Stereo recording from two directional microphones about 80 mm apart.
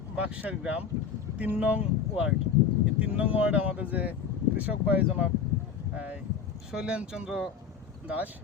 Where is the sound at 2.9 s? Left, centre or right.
Centre.